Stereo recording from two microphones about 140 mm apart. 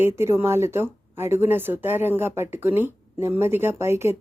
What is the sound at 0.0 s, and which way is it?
Speech, 20° right (ahead or behind).